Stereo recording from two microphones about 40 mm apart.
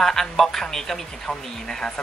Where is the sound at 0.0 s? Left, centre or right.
Centre.